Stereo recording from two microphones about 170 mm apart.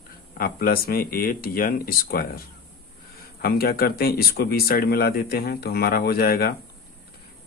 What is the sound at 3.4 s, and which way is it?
Speech, 65° left (ahead or behind).